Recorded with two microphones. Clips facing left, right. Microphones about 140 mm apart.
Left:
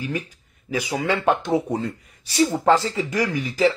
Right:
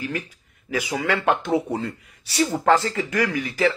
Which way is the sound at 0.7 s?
35° left (ahead or behind).